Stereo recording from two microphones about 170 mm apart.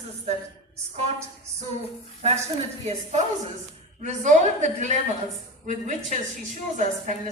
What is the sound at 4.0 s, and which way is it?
Speech, 45° right (ahead or behind).